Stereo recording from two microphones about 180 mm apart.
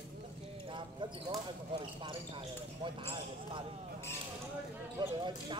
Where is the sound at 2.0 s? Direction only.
30° right (ahead or behind).